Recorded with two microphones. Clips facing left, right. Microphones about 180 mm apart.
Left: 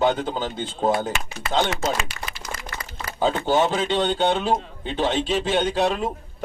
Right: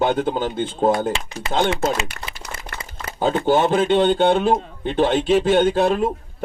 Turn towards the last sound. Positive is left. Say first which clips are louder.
# right 5 dB
turn(degrees=-50)  # may be behind; listen again after turning